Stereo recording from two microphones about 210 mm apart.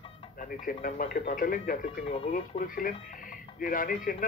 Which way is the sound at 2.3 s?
40° left (ahead or behind).